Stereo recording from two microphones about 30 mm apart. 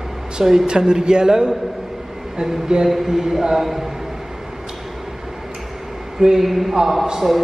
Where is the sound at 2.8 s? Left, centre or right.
Centre.